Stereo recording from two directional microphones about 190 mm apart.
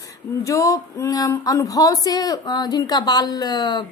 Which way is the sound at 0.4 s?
15° left (ahead or behind).